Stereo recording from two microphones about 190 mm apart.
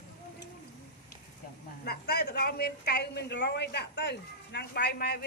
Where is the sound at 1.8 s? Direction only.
55° left (ahead or behind).